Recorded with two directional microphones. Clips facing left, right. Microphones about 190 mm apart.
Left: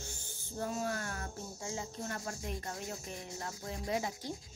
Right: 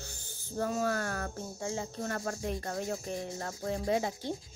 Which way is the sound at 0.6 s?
70° right (ahead or behind).